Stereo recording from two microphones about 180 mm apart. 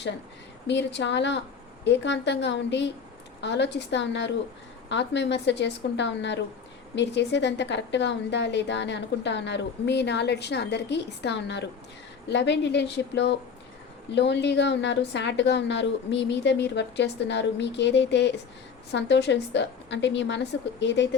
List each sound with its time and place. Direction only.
0.7 s a woman's voice: 75° left (ahead or behind)